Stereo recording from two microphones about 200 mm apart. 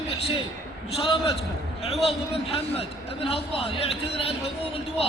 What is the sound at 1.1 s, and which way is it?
A man's voice, 30° left (ahead or behind).